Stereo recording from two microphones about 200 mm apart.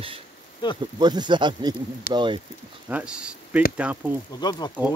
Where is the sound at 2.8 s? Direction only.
5° right (ahead or behind).